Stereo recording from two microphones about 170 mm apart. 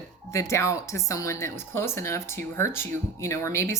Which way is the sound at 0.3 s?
15° left (ahead or behind).